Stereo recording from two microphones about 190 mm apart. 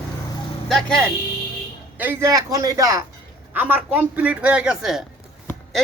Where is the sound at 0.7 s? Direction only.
5° left (ahead or behind).